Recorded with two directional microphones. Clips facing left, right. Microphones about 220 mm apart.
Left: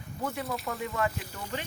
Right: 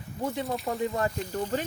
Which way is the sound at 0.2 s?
30° right (ahead or behind).